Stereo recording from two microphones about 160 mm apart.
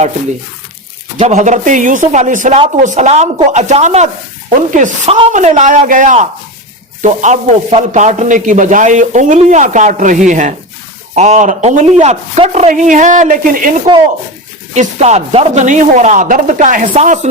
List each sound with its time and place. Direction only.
1.2 s speech: 45° right (ahead or behind)
14.7 s speech: 45° right (ahead or behind)
16.9 s speech: 45° right (ahead or behind)